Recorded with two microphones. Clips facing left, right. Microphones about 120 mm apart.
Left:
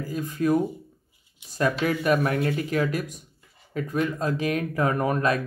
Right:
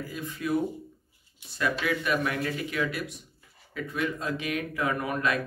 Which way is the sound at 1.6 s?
40° left (ahead or behind).